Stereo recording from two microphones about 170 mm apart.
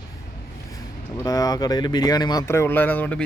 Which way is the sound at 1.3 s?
20° left (ahead or behind).